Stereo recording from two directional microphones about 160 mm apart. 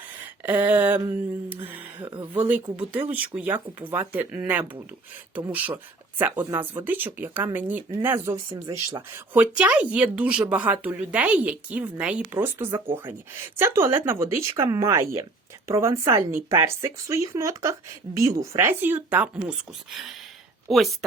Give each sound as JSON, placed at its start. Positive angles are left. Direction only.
{"t": 0.4, "sound": "speech", "side_deg": -10}